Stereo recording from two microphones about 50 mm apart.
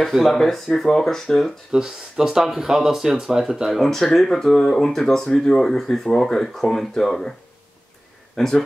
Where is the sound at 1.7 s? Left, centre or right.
Centre.